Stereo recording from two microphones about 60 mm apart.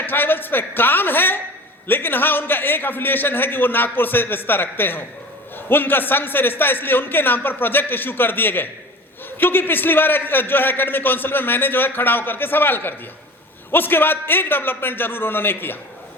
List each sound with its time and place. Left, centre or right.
0.0 s a man's voice: left